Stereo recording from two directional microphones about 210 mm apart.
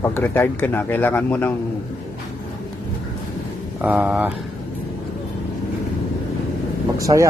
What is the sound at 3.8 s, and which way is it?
Speech, 5° right (ahead or behind).